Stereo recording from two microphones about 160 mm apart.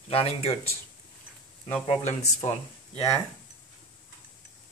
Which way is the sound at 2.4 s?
40° left (ahead or behind).